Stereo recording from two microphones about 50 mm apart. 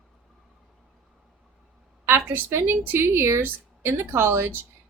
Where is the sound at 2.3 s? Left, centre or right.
Right.